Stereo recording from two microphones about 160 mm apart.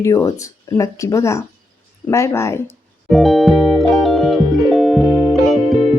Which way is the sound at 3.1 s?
Centre (ahead or behind).